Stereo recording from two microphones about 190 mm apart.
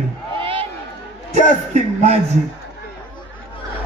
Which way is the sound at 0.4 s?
30° right (ahead or behind).